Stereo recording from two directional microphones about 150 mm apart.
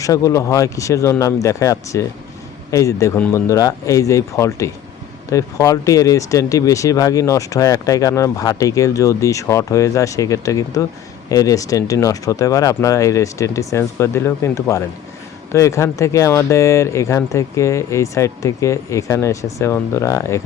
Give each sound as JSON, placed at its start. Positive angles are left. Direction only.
{"t": 0.0, "sound": "a man's voice", "side_deg": 20}